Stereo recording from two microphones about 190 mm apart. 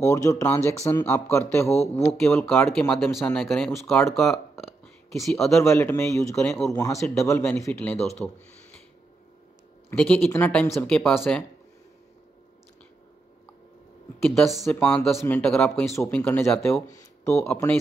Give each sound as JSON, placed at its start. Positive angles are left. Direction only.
{"t": 0.0, "sound": "speech", "side_deg": 15}
{"t": 1.7, "sound": "speech", "side_deg": 35}
{"t": 2.1, "sound": "speech", "side_deg": 5}
{"t": 5.6, "sound": "speech", "side_deg": 15}
{"t": 9.8, "sound": "speech", "side_deg": 10}
{"t": 14.2, "sound": "speech", "side_deg": 0}
{"t": 16.8, "sound": "speech", "side_deg": 15}